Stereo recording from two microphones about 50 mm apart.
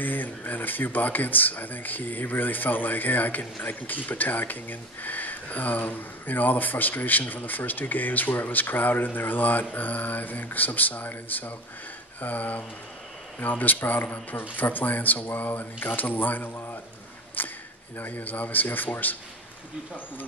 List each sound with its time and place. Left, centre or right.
0.0 s speech: left
17.4 s a sound: left
17.9 s speech: left